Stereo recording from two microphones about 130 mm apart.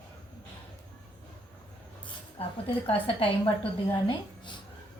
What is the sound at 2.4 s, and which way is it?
A woman's voice, 45° left (ahead or behind).